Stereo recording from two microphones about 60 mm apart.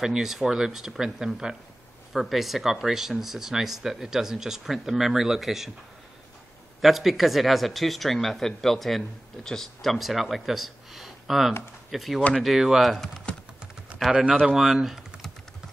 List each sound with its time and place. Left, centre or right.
0.0 s speech: centre
6.8 s speech: centre
14.1 s speech: centre
14.5 s speech: centre